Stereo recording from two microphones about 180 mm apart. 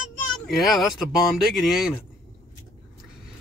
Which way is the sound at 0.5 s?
Centre (ahead or behind).